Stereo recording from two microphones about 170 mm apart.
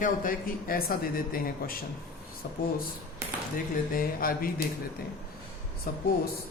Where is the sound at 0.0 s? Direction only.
55° left (ahead or behind).